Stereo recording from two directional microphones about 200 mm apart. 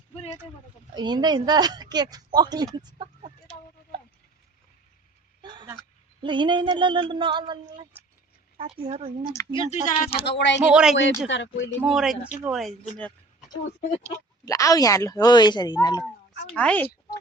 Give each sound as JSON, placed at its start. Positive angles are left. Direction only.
{"t": 0.9, "sound": "speech", "side_deg": -20}
{"t": 5.4, "sound": "a sound", "side_deg": -25}
{"t": 6.2, "sound": "speech", "side_deg": -25}
{"t": 9.3, "sound": "speech", "side_deg": 20}
{"t": 10.2, "sound": "speech", "side_deg": 60}
{"t": 10.7, "sound": "speech", "side_deg": -5}
{"t": 11.3, "sound": "speech", "side_deg": 65}
{"t": 11.8, "sound": "speech", "side_deg": 0}
{"t": 14.4, "sound": "speech", "side_deg": 15}
{"t": 16.6, "sound": "speech", "side_deg": 5}